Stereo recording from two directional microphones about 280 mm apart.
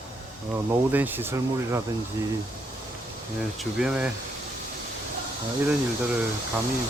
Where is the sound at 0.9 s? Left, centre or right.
Centre.